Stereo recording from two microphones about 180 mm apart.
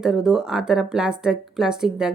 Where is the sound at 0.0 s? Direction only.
5° right (ahead or behind).